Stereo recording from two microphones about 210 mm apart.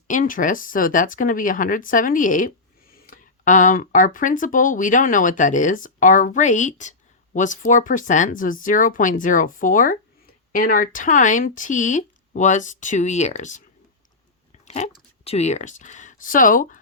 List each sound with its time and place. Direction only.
0.1 s speech: 40° left (ahead or behind)
14.6 s speech: 35° left (ahead or behind)